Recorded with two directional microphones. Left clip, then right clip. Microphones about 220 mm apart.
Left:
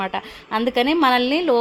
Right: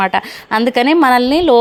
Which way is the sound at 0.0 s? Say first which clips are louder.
Right 10 dB; 20° right (ahead or behind).